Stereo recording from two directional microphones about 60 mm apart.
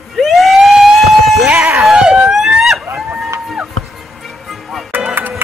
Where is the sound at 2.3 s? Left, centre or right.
Centre.